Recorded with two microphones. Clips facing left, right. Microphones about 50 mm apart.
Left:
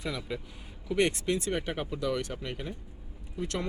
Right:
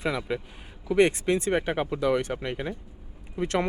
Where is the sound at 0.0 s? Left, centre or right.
Right.